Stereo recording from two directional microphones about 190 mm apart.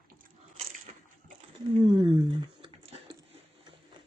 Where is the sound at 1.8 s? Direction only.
25° right (ahead or behind).